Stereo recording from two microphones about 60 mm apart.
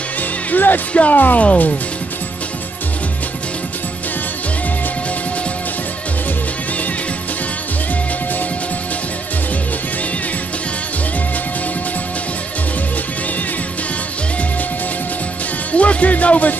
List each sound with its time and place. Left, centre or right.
0.5 s speech: left
15.7 s speech: left